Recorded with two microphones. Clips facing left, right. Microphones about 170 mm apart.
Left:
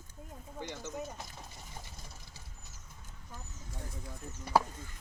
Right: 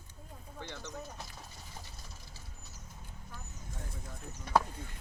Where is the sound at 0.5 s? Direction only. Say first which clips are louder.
Left 3 dB; 15° left (ahead or behind).